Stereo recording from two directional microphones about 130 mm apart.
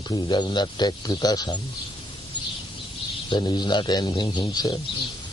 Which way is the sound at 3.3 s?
35° left (ahead or behind).